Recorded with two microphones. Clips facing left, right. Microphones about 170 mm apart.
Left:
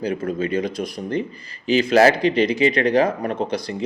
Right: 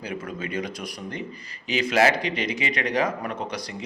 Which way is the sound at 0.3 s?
30° left (ahead or behind).